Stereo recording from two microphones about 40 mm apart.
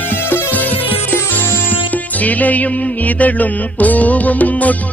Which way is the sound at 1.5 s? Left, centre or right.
Left.